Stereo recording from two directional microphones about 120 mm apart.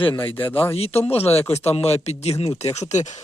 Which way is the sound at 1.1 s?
60° left (ahead or behind).